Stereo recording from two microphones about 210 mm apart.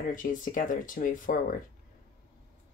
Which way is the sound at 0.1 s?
40° left (ahead or behind).